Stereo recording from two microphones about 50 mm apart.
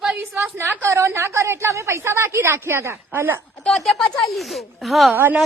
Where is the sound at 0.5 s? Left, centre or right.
Right.